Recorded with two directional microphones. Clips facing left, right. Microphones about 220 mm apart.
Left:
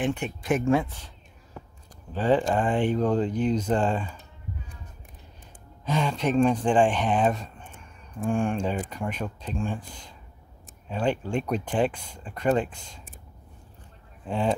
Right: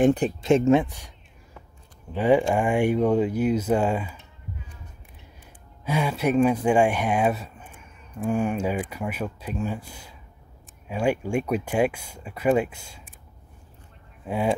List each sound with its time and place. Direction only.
0.0 s speech: 35° right (ahead or behind)
0.4 s speech: 25° right (ahead or behind)
2.1 s speech: 10° right (ahead or behind)
5.9 s speech: 10° right (ahead or behind)
14.2 s speech: 10° right (ahead or behind)